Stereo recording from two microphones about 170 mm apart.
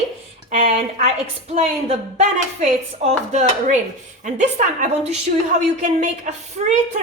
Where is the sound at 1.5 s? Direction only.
45° right (ahead or behind).